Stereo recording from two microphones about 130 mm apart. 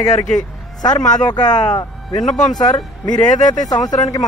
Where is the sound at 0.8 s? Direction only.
30° left (ahead or behind).